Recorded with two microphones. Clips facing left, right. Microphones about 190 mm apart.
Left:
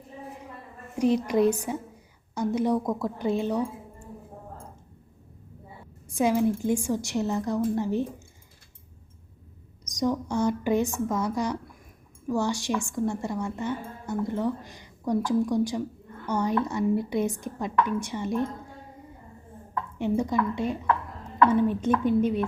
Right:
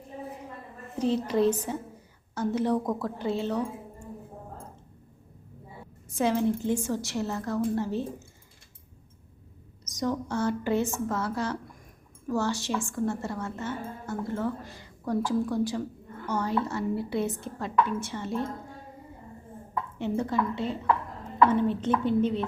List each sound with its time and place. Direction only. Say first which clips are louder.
0.9 s a woman's voice: left 3 dB; 15° left (ahead or behind)
6.1 s a woman's voice: left 2 dB; 10° left (ahead or behind)
9.8 s a woman's voice: left 3 dB; 15° left (ahead or behind)
20.0 s a woman's voice: left 3 dB; 15° left (ahead or behind)